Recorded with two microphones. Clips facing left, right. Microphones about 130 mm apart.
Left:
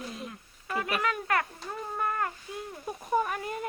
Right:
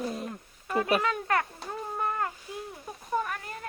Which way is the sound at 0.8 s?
30° right (ahead or behind).